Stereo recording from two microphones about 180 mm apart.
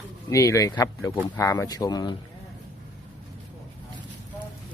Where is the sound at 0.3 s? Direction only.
15° left (ahead or behind).